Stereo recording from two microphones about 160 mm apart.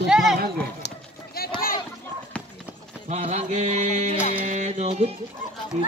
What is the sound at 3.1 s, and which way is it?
Mantra, 45° right (ahead or behind).